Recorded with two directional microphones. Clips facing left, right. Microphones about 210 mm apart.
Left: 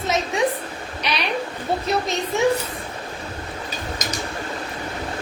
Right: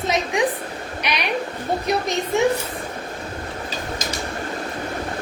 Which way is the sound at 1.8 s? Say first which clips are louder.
Right 2 dB; 15° right (ahead or behind).